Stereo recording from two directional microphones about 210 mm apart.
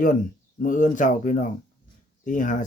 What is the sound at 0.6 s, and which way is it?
Speech, 40° left (ahead or behind).